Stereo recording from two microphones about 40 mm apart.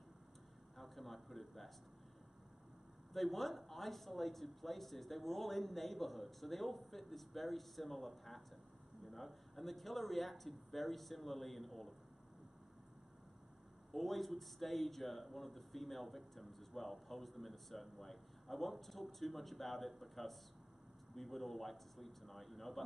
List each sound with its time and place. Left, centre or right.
0.7 s speech: centre
3.1 s speech: centre
13.9 s speech: centre